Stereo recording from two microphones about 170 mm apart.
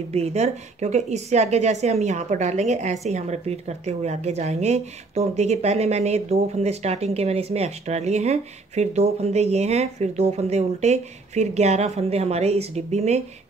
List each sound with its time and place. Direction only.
0.1 s a woman's voice: 40° right (ahead or behind)